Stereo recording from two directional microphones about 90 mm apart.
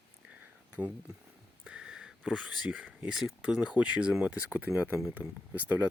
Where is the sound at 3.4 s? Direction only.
10° right (ahead or behind).